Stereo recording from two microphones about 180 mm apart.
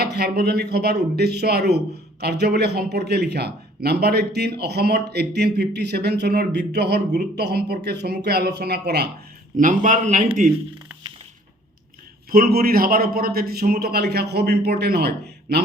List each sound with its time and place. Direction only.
0.0 s a man's voice: 65° right (ahead or behind)
9.6 s a man's voice: 45° right (ahead or behind)
12.3 s a man's voice: 55° right (ahead or behind)